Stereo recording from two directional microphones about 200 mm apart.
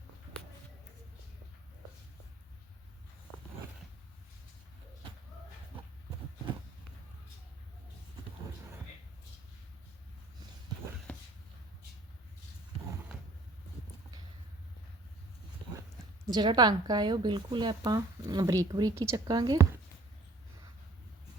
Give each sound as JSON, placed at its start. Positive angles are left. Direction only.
{"t": 16.2, "sound": "speech", "side_deg": -20}